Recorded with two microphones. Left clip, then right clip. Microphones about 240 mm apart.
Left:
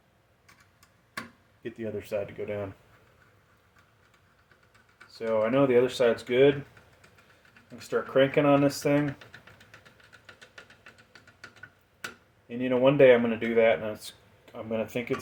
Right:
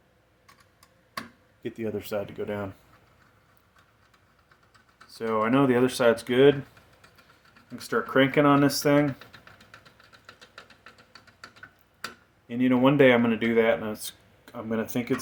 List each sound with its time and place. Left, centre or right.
1.6 s speech: right
5.2 s speech: right
7.8 s speech: right
12.5 s speech: right